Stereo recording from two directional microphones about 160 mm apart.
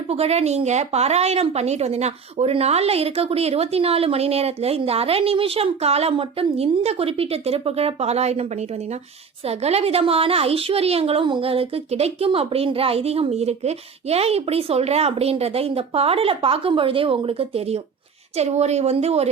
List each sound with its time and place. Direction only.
0.1 s speech: 40° right (ahead or behind)
9.5 s speech: 40° right (ahead or behind)